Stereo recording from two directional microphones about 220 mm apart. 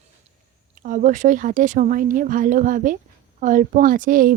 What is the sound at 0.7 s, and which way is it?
Speech, 35° right (ahead or behind).